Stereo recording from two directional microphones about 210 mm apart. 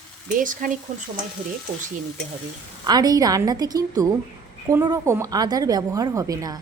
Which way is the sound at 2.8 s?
20° right (ahead or behind).